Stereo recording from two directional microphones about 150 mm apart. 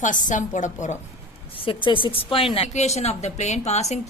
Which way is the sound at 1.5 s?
35° left (ahead or behind).